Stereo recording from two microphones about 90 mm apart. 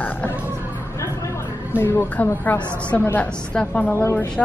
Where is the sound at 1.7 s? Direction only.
25° left (ahead or behind); by 3.9 s 10° left (ahead or behind).